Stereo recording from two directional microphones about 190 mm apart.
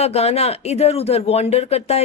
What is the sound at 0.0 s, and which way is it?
Speech, 35° left (ahead or behind).